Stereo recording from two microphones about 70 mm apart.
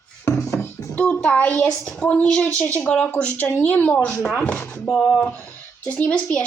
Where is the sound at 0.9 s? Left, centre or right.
Centre.